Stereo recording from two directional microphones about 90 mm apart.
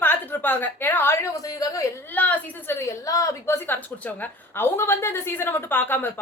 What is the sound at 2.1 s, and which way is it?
A woman's voice, 20° left (ahead or behind).